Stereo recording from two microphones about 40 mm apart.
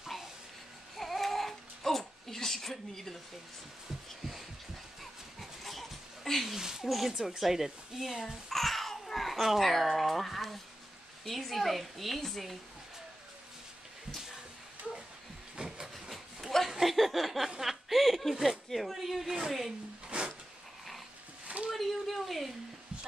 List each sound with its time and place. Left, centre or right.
0.9 s babbling: centre
5.4 s dog: centre
6.5 s a sound: centre
6.9 s speech: centre
8.5 s babbling: centre
9.6 s speech: centre
15.5 s vehicle: right
16.1 s a sound: centre
16.6 s chuckle: centre
18.7 s speech: centre
19.2 s a woman's voice: centre
20.1 s a sound: right
21.7 s a sound: centre